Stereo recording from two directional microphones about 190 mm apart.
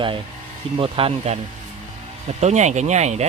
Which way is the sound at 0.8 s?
30° right (ahead or behind).